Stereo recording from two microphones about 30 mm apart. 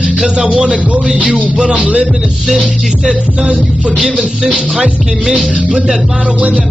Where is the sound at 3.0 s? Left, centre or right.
Right.